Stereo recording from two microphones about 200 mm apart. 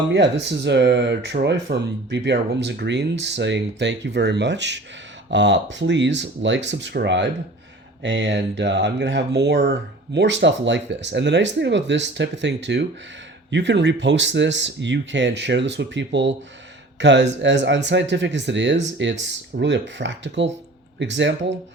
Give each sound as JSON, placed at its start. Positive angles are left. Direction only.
{"t": 0.1, "sound": "speech", "side_deg": -60}